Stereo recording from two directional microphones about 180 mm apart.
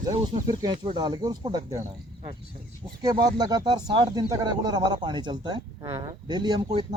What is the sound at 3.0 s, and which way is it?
Speech, 20° right (ahead or behind).